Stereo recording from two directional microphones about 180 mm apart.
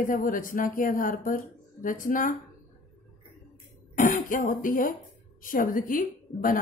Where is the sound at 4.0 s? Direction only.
50° left (ahead or behind).